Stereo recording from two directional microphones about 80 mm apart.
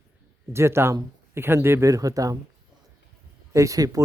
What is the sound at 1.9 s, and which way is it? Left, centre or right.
Speech, right.